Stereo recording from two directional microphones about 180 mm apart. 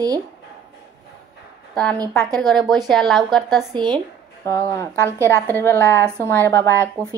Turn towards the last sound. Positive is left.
turn(degrees=15)  # may be behind; listen again after turning